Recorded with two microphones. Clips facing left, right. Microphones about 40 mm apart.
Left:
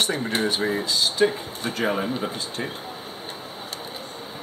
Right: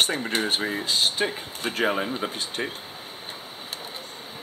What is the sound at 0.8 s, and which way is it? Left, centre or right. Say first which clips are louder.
Speech: left 4 dB; right.